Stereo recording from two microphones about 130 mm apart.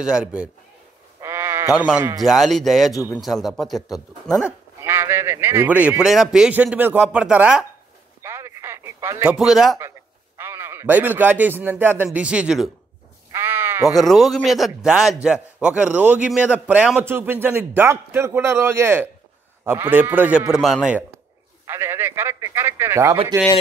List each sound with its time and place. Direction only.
0.0 s a man's voice: 5° right (ahead or behind)
1.2 s bleat: 20° right (ahead or behind)
1.7 s a man's voice: 5° right (ahead or behind)
2.2 s a man's voice: centre (ahead or behind)
4.4 s a man's voice: 15° right (ahead or behind)
8.2 s radio: 20° right (ahead or behind)
9.3 s a man's voice: 5° right (ahead or behind)
9.8 s a man's voice: 20° right (ahead or behind); by 12.7 s 5° right (ahead or behind)
13.3 s sheep: 20° right (ahead or behind)
13.9 s a man's voice: centre (ahead or behind)
21.6 s speech: 20° right (ahead or behind)